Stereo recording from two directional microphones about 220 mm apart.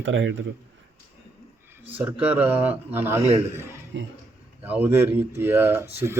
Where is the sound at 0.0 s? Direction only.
55° right (ahead or behind).